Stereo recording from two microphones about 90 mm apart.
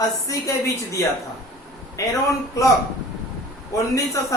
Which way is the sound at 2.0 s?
35° left (ahead or behind).